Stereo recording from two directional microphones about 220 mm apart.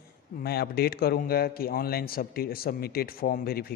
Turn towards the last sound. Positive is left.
turn(degrees=45)  # may be behind; listen again after turning